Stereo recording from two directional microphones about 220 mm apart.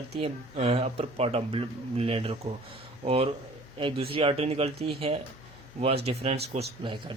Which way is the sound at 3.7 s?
25° right (ahead or behind).